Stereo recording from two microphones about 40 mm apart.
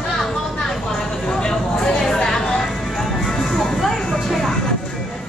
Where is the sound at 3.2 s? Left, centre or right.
Centre.